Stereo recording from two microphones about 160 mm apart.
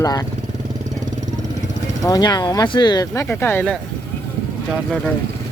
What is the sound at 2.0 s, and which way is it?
Speech, 25° left (ahead or behind).